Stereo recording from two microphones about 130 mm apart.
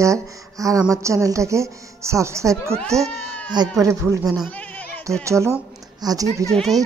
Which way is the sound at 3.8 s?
25° right (ahead or behind).